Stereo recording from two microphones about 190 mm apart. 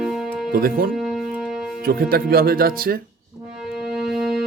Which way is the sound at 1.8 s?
50° right (ahead or behind).